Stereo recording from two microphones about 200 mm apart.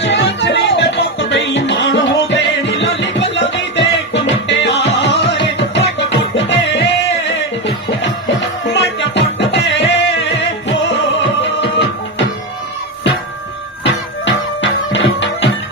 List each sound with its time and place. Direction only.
0.0 s music: 60° left (ahead or behind)
13.8 s music: 65° left (ahead or behind)